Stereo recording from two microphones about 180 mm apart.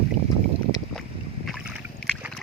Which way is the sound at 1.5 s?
Centre (ahead or behind).